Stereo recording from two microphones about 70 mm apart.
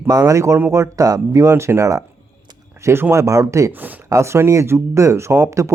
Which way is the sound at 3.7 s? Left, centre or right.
Right.